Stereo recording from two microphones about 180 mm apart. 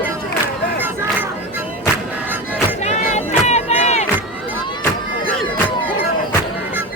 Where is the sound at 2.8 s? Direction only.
40° left (ahead or behind).